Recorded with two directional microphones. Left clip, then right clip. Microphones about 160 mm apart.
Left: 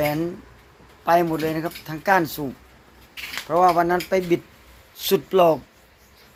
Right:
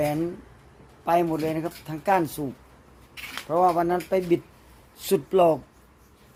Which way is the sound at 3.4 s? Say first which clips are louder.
Left 4 dB; 5° left (ahead or behind).